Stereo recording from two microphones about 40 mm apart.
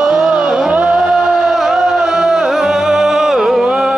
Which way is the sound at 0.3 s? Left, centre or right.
Right.